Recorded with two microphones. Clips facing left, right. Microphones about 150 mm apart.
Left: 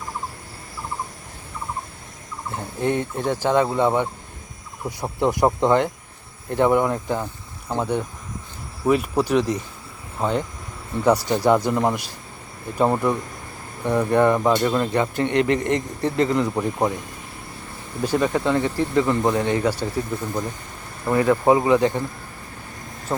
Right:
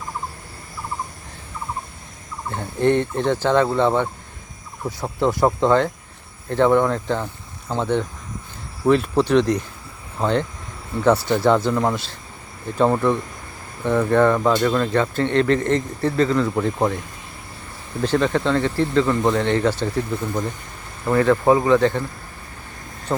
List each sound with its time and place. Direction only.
2.5 s speech: 10° left (ahead or behind)
5.2 s speech: 20° left (ahead or behind)
18.0 s speech: 10° left (ahead or behind)
21.0 s speech: 15° left (ahead or behind)